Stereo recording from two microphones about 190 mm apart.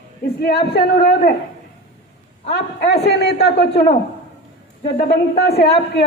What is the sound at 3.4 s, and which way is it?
Speech, 60° left (ahead or behind).